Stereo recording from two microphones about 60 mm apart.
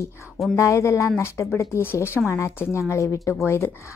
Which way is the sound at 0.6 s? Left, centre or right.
Left.